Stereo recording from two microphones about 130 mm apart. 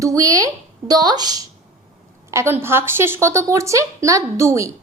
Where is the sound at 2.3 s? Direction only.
20° right (ahead or behind).